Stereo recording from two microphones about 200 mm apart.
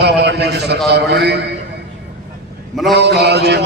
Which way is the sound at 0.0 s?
55° right (ahead or behind).